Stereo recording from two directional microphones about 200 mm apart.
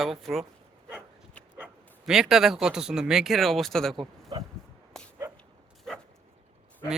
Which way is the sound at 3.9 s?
20° right (ahead or behind).